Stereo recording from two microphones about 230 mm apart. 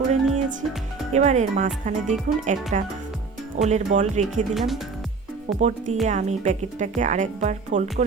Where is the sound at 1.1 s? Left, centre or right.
Right.